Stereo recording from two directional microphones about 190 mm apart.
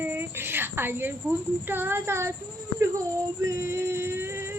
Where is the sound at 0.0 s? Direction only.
10° right (ahead or behind).